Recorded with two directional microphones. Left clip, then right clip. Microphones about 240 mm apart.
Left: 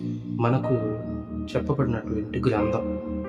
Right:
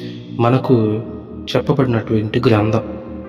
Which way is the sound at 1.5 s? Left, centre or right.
Right.